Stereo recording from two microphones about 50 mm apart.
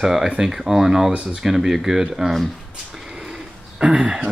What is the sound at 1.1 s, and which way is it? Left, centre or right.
Speech, right.